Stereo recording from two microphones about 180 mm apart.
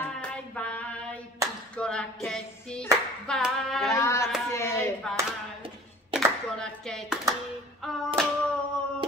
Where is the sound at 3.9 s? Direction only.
15° left (ahead or behind).